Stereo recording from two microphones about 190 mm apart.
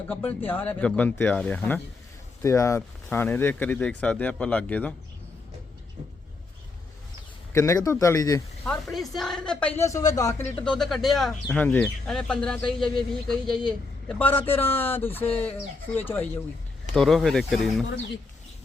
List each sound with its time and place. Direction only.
0.1 s speech: 10° left (ahead or behind)
7.5 s speech: 15° left (ahead or behind)
8.6 s speech: centre (ahead or behind); by 10.4 s 20° left (ahead or behind)
10.6 s speech: 5° left (ahead or behind)